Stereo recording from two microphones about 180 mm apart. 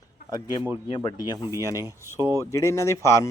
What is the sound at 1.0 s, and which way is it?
Speech, 20° left (ahead or behind).